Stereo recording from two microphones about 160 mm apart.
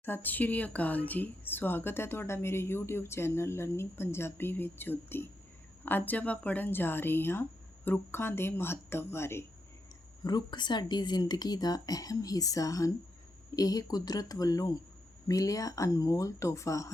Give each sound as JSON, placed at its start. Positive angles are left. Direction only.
{"t": 0.0, "sound": "speech", "side_deg": 10}
{"t": 10.2, "sound": "speech", "side_deg": 25}